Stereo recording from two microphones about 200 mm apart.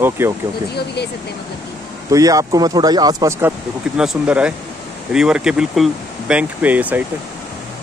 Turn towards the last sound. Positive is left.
turn(degrees=-10)  # may be behind; listen again after turning